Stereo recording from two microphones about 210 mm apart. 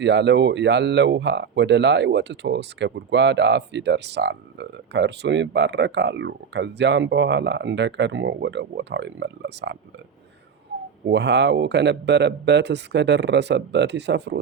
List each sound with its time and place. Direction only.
0.0 s speech: 55° right (ahead or behind)
11.0 s speech: 55° right (ahead or behind)